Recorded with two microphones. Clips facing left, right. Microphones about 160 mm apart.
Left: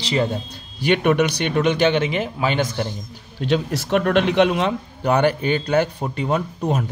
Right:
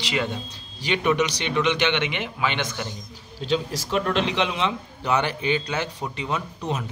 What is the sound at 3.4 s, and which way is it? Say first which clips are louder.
A man's voice: left 4 dB; 60° left (ahead or behind).